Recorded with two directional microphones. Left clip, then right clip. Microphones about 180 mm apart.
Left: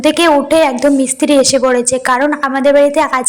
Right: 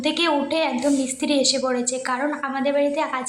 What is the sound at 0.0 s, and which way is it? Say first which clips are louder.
A woman's voice: left 11 dB; 40° left (ahead or behind).